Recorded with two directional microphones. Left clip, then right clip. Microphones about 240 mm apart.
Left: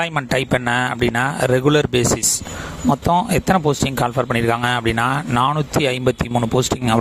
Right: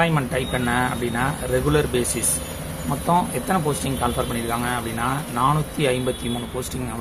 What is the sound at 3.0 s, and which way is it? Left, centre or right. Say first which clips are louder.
Speech: left 2 dB; left.